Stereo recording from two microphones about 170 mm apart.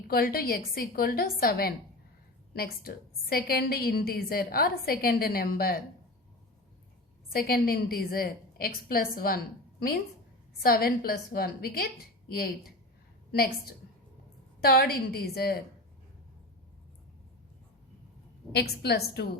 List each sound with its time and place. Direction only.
0.1 s a woman's voice: 60° left (ahead or behind)
7.3 s a woman's voice: 60° left (ahead or behind)
10.6 s a woman's voice: 65° left (ahead or behind)
13.3 s a woman's voice: 65° left (ahead or behind)
18.5 s a woman's voice: 70° left (ahead or behind)